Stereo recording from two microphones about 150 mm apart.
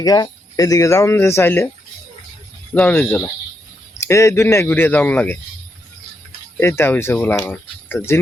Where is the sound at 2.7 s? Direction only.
10° left (ahead or behind).